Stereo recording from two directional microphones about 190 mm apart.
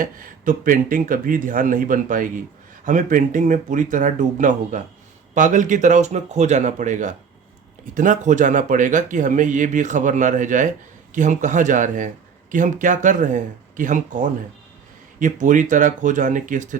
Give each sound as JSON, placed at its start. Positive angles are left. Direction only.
{"t": 0.0, "sound": "speech", "side_deg": -45}